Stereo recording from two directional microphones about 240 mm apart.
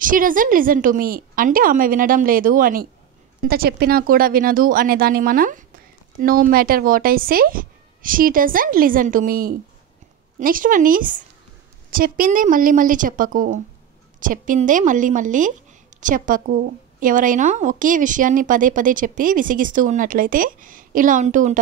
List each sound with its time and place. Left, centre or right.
0.0 s speech: right